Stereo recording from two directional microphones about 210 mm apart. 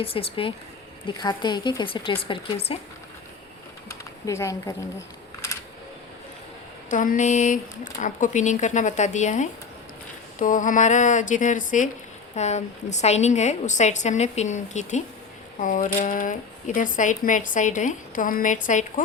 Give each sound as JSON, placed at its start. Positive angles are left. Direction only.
{"t": 0.0, "sound": "speech", "side_deg": 25}
{"t": 3.8, "sound": "a sound", "side_deg": 15}
{"t": 6.9, "sound": "speech", "side_deg": 40}